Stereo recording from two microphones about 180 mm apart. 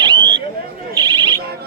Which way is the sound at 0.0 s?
25° right (ahead or behind).